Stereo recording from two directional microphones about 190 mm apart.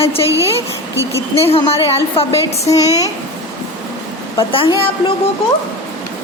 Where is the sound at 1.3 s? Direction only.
30° left (ahead or behind).